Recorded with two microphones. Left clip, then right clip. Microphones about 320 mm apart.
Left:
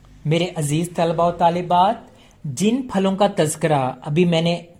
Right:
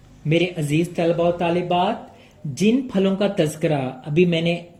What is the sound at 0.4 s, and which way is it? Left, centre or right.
Speech, left.